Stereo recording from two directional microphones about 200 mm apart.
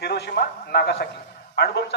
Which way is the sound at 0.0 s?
55° left (ahead or behind).